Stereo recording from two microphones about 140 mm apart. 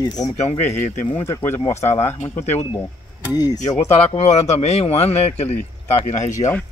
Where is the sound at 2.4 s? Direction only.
50° left (ahead or behind).